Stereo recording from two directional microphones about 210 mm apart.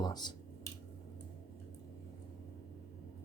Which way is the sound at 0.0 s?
20° left (ahead or behind).